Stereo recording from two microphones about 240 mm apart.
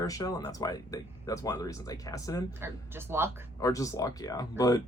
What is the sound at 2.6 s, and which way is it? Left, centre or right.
Speech, centre.